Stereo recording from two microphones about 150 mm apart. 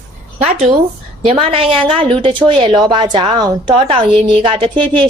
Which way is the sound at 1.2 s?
40° right (ahead or behind).